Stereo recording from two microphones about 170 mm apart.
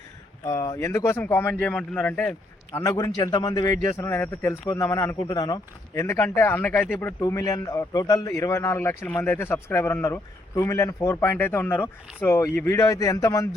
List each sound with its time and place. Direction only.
0.4 s a man's voice: 20° left (ahead or behind)